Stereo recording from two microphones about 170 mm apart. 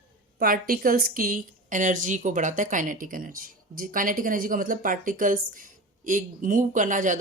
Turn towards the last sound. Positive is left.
turn(degrees=-50)  # may be behind; listen again after turning